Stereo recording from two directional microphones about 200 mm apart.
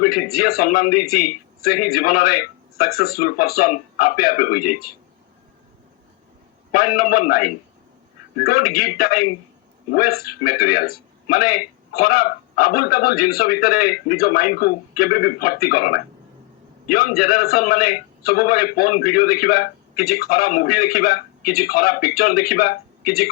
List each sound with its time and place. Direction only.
0.3 s speech: 50° left (ahead or behind)
6.7 s speech: 45° left (ahead or behind)